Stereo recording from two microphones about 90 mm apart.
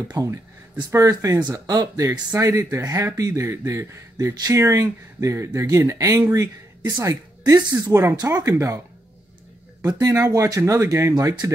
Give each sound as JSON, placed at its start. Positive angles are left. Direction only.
{"t": 0.0, "sound": "speech", "side_deg": -40}
{"t": 9.8, "sound": "speech", "side_deg": -40}